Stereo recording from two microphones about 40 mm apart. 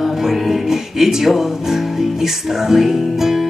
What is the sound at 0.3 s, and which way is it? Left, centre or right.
Music, centre.